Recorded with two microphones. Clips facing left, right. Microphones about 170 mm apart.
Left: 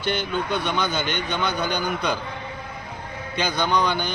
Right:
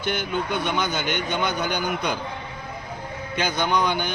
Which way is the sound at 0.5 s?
15° right (ahead or behind).